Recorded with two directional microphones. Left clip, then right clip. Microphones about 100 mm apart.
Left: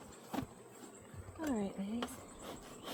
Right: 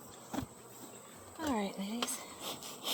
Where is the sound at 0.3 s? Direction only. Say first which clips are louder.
Right 1 dB; 75° right (ahead or behind).